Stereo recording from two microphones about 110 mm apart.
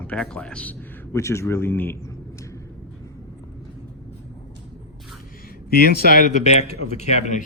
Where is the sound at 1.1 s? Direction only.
25° left (ahead or behind).